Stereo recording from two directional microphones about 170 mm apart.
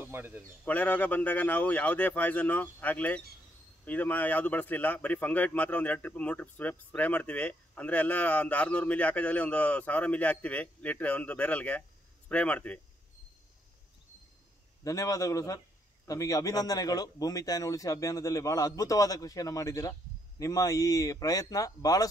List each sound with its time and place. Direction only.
0.0 s speech: 10° right (ahead or behind)
0.7 s speech: 10° left (ahead or behind)
14.8 s a man's voice: 20° left (ahead or behind)